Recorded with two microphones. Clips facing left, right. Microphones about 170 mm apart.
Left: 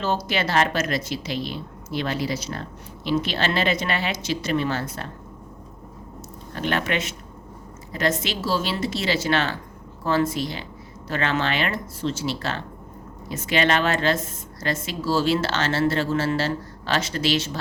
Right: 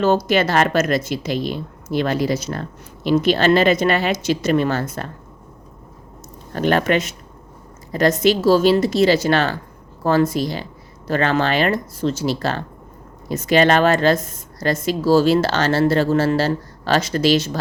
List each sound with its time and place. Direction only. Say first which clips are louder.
0.0 s speech: right 8 dB; 50° right (ahead or behind)
6.5 s speech: right 8 dB; 45° right (ahead or behind)